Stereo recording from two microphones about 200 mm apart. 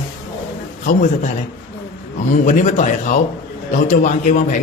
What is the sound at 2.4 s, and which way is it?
Speech, 40° left (ahead or behind).